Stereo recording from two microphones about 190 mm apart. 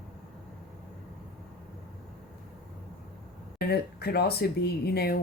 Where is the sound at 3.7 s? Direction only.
55° left (ahead or behind).